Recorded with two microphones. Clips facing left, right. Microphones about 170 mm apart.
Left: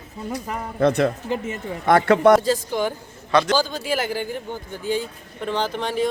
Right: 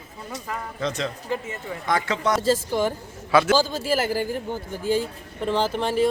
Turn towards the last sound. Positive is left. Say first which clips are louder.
# right 2 dB
turn(degrees=-5)  # may be behind; listen again after turning